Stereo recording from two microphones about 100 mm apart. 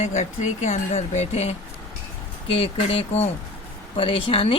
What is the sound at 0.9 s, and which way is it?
Speech, 90° left.